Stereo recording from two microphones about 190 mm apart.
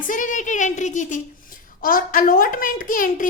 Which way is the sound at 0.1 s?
40° left (ahead or behind).